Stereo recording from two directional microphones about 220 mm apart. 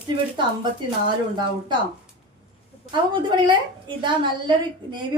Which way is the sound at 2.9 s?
20° right (ahead or behind).